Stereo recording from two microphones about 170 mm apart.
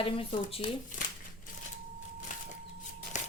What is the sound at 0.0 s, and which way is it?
Speech, 35° left (ahead or behind).